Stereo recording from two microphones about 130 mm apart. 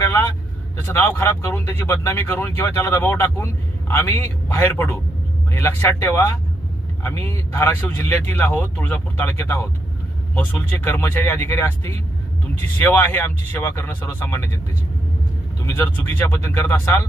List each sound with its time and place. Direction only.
0.0 s vehicle: 20° left (ahead or behind)
0.9 s speech: 15° left (ahead or behind)
15.6 s speech: 15° left (ahead or behind)